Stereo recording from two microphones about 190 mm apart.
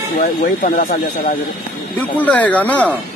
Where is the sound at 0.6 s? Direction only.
45° left (ahead or behind).